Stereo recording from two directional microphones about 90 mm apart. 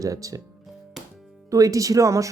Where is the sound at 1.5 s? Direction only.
40° right (ahead or behind).